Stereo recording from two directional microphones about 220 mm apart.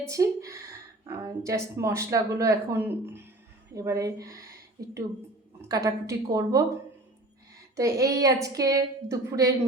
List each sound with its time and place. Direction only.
0.1 s a woman's voice: 15° right (ahead or behind)
5.6 s speech: 15° right (ahead or behind)
7.8 s speech: 15° right (ahead or behind)